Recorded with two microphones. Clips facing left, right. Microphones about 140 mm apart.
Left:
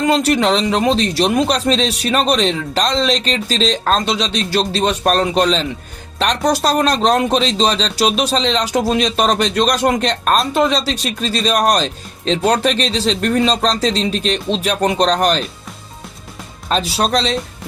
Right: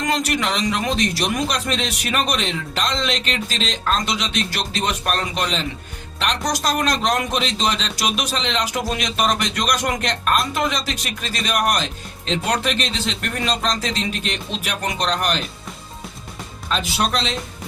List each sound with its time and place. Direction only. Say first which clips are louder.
0.0 s speech: left 8 dB; 30° left (ahead or behind)
16.6 s speech: left 5 dB; 35° left (ahead or behind)